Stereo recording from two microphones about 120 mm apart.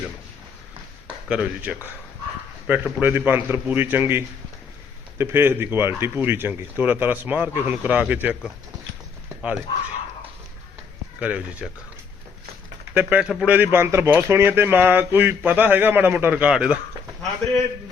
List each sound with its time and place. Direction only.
1.3 s speech: 10° right (ahead or behind)
9.4 s speech: 10° right (ahead or behind)
11.2 s speech: 10° right (ahead or behind)
12.9 s speech: 15° right (ahead or behind)